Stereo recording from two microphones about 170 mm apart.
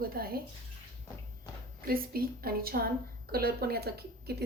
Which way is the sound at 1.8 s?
60° right (ahead or behind).